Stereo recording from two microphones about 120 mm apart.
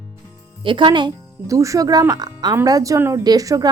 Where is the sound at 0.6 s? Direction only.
40° right (ahead or behind).